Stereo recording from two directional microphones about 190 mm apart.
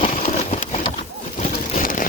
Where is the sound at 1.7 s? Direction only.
45° left (ahead or behind).